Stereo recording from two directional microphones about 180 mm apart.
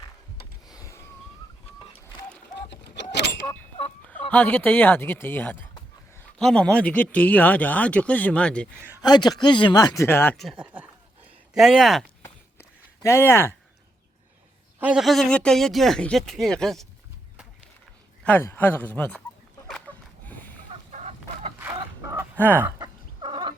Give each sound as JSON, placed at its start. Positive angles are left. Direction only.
{"t": 0.7, "sound": "a sound", "side_deg": 15}
{"t": 2.6, "sound": "a sound", "side_deg": 70}
{"t": 4.3, "sound": "speech", "side_deg": 10}
{"t": 9.0, "sound": "speech", "side_deg": 25}
{"t": 10.3, "sound": "speech", "side_deg": 0}
{"t": 12.2, "sound": "a sound", "side_deg": 15}
{"t": 14.8, "sound": "speech", "side_deg": -5}
{"t": 18.2, "sound": "speech", "side_deg": 10}
{"t": 19.6, "sound": "a sound", "side_deg": 5}
{"t": 20.9, "sound": "chicken", "side_deg": -40}
{"t": 21.6, "sound": "fowl", "side_deg": -15}
{"t": 22.8, "sound": "chicken", "side_deg": -25}